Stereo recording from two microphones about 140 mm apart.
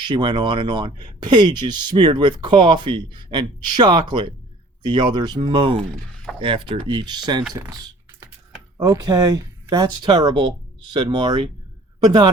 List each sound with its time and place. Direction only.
0.0 s speech: 35° right (ahead or behind)